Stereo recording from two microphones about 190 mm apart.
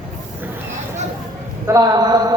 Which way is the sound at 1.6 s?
20° right (ahead or behind).